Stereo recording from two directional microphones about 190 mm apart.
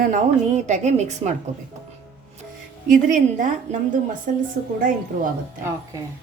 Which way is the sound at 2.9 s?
45° right (ahead or behind).